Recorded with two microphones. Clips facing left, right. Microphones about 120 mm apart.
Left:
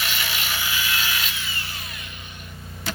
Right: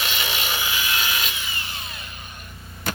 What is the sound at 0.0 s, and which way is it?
Wood, 20° right (ahead or behind).